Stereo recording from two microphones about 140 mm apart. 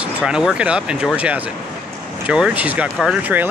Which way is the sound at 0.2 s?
5° right (ahead or behind).